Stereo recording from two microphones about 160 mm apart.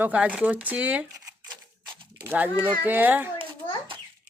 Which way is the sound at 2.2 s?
10° right (ahead or behind).